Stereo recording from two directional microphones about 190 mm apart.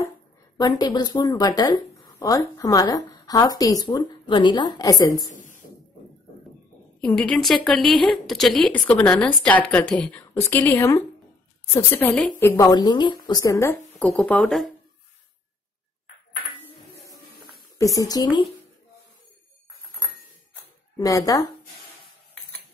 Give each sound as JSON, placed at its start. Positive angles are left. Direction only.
{"t": 0.6, "sound": "speech", "side_deg": 20}
{"t": 5.3, "sound": "a sound", "side_deg": 40}
{"t": 7.0, "sound": "speech", "side_deg": 5}
{"t": 17.7, "sound": "speech", "side_deg": 15}
{"t": 21.0, "sound": "speech", "side_deg": 20}